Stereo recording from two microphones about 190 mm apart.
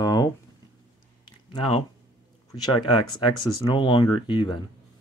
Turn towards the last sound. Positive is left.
turn(degrees=25)  # may be behind; listen again after turning